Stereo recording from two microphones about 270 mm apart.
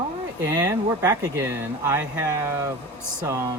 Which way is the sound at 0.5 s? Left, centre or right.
Centre.